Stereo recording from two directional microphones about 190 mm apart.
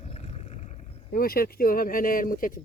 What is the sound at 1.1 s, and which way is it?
Speech, 50° left (ahead or behind).